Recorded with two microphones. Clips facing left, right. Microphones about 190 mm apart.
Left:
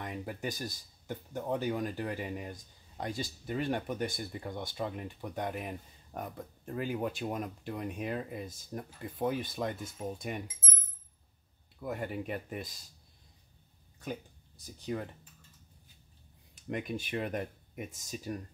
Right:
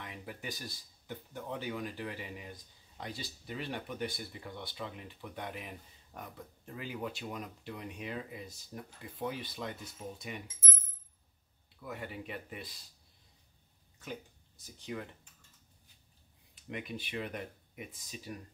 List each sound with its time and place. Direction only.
0.0 s speech: 45° left (ahead or behind)
11.8 s speech: 50° left (ahead or behind)
14.8 s speech: 40° left (ahead or behind)
16.5 s speech: 45° left (ahead or behind)